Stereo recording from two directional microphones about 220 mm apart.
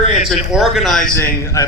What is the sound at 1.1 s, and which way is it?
Speech, 15° left (ahead or behind).